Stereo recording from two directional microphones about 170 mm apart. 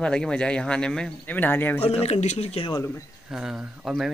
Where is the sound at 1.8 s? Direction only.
35° left (ahead or behind).